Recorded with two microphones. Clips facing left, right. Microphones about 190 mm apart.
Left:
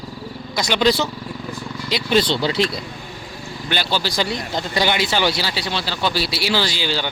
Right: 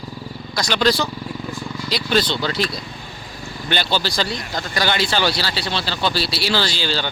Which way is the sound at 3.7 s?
5° left (ahead or behind).